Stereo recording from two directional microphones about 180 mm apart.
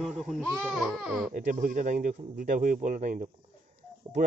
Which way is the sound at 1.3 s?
45° right (ahead or behind).